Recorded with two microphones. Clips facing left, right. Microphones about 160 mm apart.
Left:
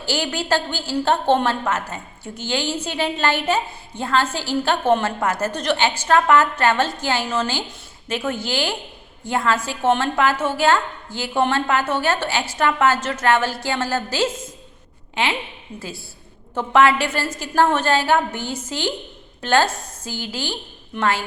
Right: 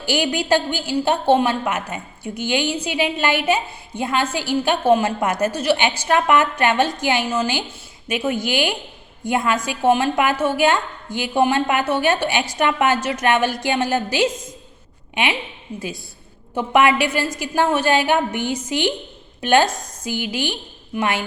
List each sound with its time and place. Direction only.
0.0 s a woman's voice: 15° right (ahead or behind)
15.7 s a woman's voice: 10° right (ahead or behind)